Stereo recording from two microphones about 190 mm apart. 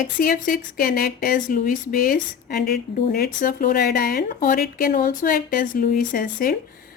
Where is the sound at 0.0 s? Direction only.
50° left (ahead or behind).